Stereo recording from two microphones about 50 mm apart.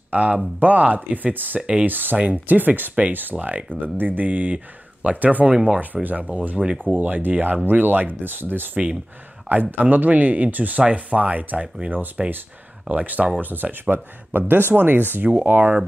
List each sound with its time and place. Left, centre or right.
0.1 s speech: right
5.9 s speech: centre
6.3 s speech: right
11.9 s speech: right